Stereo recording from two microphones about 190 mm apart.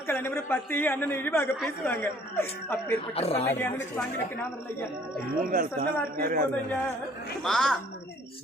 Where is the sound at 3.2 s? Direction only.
30° left (ahead or behind).